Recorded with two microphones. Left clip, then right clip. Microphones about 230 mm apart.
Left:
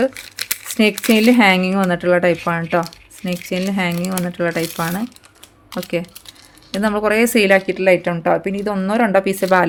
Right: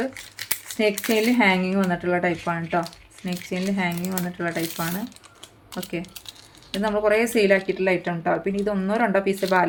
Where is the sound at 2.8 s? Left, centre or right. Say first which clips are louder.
Left 6 dB; centre.